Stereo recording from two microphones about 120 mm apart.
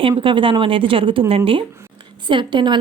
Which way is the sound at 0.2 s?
45° right (ahead or behind).